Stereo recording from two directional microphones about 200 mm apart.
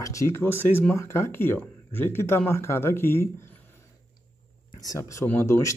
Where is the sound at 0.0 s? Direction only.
15° left (ahead or behind).